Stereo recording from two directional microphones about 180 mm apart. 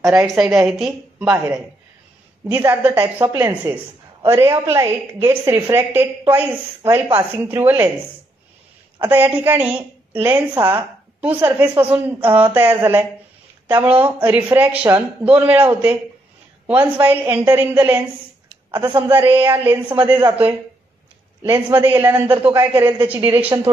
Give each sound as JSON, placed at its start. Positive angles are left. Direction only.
{"t": 0.2, "sound": "a woman's voice", "side_deg": 0}
{"t": 2.4, "sound": "a woman's voice", "side_deg": -10}
{"t": 3.3, "sound": "a woman's voice", "side_deg": -20}
{"t": 9.0, "sound": "a woman's voice", "side_deg": -10}
{"t": 18.7, "sound": "a woman's voice", "side_deg": -25}
{"t": 18.9, "sound": "a woman's voice", "side_deg": -10}
{"t": 21.4, "sound": "a woman's voice", "side_deg": -10}